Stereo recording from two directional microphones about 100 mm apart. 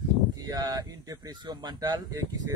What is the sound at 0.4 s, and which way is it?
Speech, 40° right (ahead or behind).